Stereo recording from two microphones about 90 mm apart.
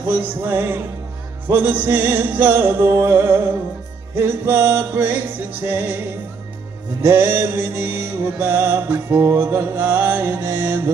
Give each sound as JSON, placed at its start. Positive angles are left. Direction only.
{"t": 0.0, "sound": "music", "side_deg": -25}
{"t": 7.0, "sound": "music", "side_deg": -25}